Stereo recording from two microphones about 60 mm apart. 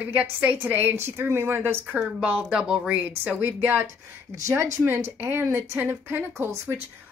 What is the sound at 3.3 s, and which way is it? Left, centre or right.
Speech, right.